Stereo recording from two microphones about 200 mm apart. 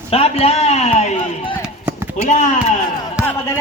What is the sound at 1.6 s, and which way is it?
Run, 10° right (ahead or behind).